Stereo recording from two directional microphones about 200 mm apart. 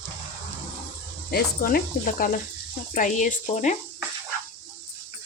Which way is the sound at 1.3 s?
45° left (ahead or behind).